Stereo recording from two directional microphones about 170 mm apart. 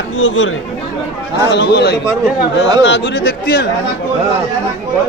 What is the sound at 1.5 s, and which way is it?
Speech, 80° left.